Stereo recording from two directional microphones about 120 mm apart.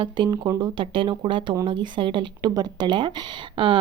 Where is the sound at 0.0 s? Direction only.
40° right (ahead or behind).